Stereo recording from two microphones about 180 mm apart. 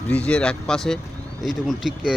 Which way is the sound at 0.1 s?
5° left (ahead or behind).